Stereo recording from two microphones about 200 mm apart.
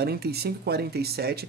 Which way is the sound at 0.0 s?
50° right (ahead or behind).